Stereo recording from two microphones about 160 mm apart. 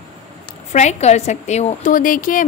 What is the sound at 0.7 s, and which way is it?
A woman's voice, 45° left (ahead or behind).